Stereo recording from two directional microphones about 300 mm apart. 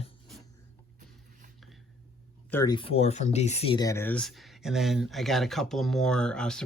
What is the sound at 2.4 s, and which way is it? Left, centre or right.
Speech, centre.